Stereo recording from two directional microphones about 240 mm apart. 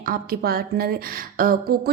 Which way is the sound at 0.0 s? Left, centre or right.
Right.